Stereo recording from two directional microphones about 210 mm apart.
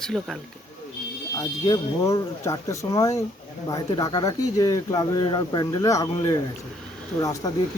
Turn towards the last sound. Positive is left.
turn(degrees=15)  # may be behind; listen again after turning